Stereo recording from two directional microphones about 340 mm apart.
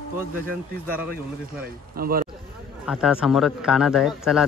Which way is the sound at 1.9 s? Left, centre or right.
Right.